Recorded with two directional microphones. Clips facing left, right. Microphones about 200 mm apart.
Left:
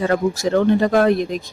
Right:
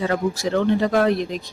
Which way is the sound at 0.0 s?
45° left (ahead or behind).